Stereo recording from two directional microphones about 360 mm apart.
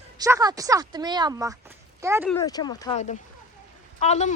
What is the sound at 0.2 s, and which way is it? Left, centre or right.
A woman's voice, centre.